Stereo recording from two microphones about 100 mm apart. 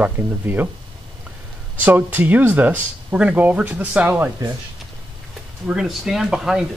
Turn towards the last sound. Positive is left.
turn(degrees=-5)  # may be behind; listen again after turning